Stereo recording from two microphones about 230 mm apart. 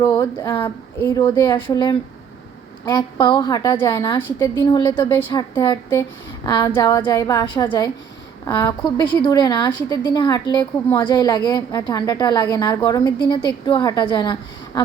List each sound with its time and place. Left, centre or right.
0.0 s a woman's voice: centre